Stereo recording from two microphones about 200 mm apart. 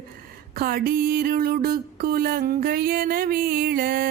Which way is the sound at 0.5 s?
45° right (ahead or behind).